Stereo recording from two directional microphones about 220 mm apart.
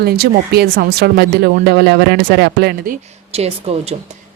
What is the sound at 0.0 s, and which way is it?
Speech, 45° right (ahead or behind).